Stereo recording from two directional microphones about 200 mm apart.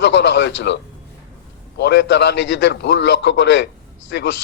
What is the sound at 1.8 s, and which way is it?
A man's voice, 60° left (ahead or behind).